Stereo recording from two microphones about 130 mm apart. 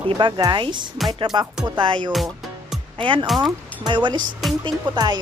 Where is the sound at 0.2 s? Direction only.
35° right (ahead or behind).